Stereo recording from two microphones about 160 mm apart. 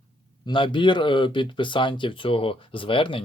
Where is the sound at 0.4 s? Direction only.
30° left (ahead or behind).